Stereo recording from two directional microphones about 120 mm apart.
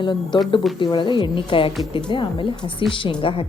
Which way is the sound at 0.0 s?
40° left (ahead or behind).